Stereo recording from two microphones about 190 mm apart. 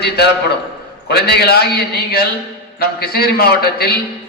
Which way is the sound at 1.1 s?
55° left (ahead or behind).